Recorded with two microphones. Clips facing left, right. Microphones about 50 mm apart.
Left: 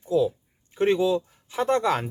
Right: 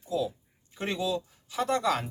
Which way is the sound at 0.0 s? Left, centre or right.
Left.